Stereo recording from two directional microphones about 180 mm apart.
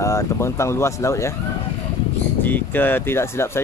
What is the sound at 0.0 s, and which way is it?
Speech, 15° left (ahead or behind).